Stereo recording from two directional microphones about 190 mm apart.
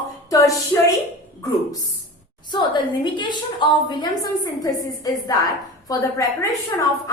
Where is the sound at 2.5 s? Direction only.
25° left (ahead or behind).